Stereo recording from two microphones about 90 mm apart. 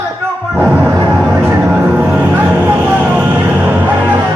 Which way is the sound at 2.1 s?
20° right (ahead or behind).